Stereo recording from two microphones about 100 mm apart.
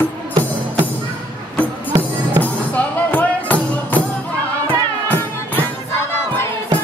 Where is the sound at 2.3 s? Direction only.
15° left (ahead or behind).